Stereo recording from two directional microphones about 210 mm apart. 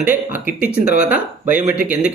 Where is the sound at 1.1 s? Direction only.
5° right (ahead or behind).